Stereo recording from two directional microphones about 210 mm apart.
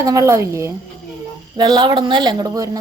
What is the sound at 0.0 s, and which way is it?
A woman's voice, 15° right (ahead or behind).